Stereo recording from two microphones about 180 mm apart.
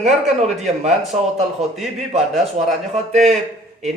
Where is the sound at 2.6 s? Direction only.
40° right (ahead or behind).